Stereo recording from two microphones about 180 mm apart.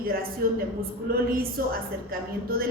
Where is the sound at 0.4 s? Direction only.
55° right (ahead or behind).